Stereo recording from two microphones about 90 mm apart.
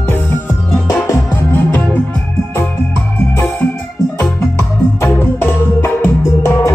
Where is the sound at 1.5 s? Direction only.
20° left (ahead or behind).